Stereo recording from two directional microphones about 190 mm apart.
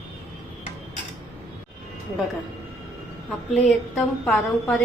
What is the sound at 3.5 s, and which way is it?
A woman's voice, centre (ahead or behind).